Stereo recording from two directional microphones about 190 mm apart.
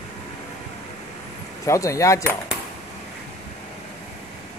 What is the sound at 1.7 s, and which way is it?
Speech, 15° left (ahead or behind).